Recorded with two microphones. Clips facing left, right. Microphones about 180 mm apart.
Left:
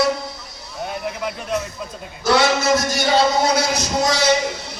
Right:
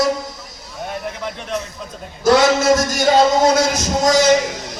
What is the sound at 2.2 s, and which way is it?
A man's voice, 45° right (ahead or behind).